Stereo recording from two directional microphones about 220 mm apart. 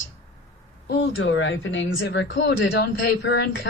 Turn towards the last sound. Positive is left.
turn(degrees=55)  # may be behind; listen again after turning